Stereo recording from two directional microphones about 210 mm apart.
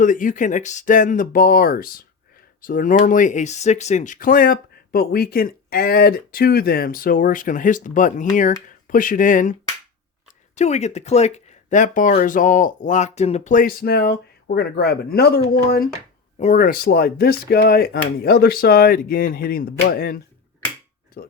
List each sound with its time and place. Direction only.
0.0 s speech: 40° left (ahead or behind)
21.2 s speech: 45° left (ahead or behind)